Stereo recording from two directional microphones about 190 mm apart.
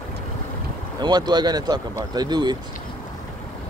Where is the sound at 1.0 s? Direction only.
20° right (ahead or behind).